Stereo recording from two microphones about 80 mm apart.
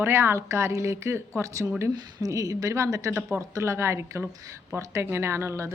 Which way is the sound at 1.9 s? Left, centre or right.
Right.